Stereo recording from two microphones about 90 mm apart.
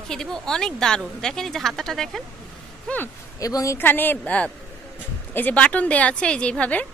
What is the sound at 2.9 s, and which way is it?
Speech, 15° left (ahead or behind).